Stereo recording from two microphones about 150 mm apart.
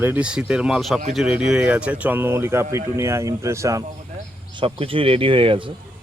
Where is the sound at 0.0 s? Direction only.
10° right (ahead or behind).